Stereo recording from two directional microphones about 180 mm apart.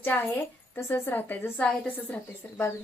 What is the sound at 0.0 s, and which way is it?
A woman's voice, 10° left (ahead or behind).